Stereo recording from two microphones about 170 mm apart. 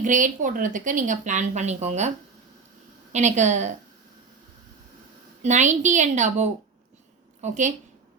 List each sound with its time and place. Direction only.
0.0 s speech: 50° right (ahead or behind)
5.4 s speech: 45° right (ahead or behind)